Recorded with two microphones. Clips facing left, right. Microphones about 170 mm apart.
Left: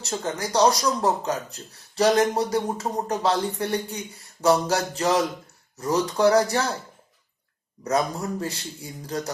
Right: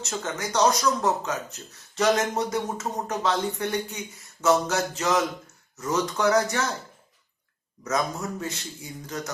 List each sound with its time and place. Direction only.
0.0 s speech: 35° left (ahead or behind)
7.9 s speech: 35° left (ahead or behind)